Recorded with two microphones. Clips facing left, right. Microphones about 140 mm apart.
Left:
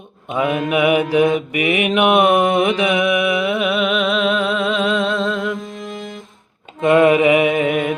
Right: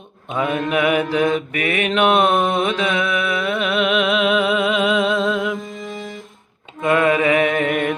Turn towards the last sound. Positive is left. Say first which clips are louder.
# left 2 dB
turn(degrees=5)  # may be behind; listen again after turning